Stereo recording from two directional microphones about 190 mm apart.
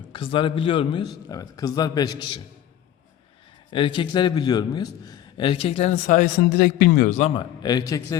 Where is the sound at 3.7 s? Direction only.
25° left (ahead or behind).